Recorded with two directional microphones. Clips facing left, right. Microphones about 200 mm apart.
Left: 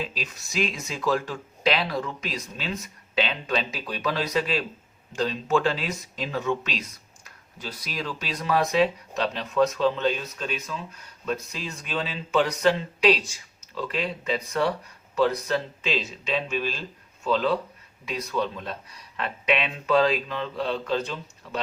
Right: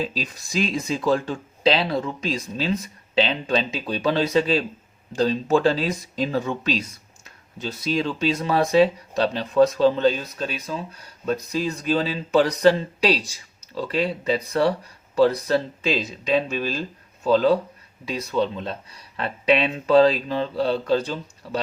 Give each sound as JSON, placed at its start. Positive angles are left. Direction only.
{"t": 0.0, "sound": "speech", "side_deg": -35}